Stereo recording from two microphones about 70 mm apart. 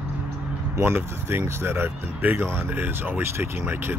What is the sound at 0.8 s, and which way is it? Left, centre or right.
Speech, right.